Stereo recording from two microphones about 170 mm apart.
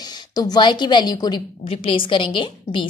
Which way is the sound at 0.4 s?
25° left (ahead or behind).